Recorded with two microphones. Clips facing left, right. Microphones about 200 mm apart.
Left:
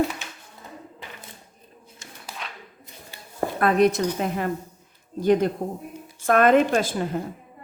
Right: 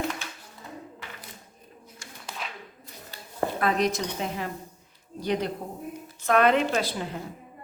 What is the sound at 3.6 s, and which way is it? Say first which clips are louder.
A woman's voice: left 8 dB; 55° left (ahead or behind).